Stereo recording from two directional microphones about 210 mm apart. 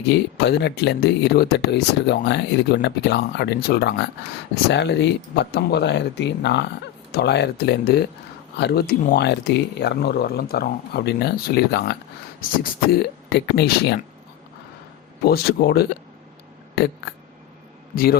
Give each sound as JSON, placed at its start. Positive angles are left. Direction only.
{"t": 0.3, "sound": "speech", "side_deg": 50}
{"t": 15.2, "sound": "speech", "side_deg": 45}
{"t": 17.9, "sound": "a man's voice", "side_deg": 45}